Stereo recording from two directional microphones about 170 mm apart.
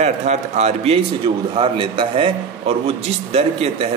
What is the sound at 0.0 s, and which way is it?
A man's voice, 40° right (ahead or behind).